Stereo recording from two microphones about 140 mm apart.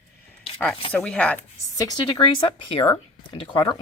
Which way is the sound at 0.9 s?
10° left (ahead or behind).